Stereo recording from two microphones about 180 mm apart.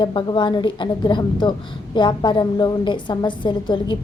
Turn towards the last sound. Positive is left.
turn(degrees=25)  # may be behind; listen again after turning